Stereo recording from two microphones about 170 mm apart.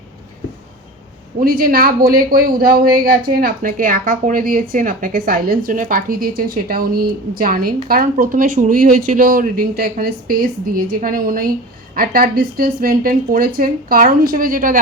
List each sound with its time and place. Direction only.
1.4 s speech: 60° right (ahead or behind)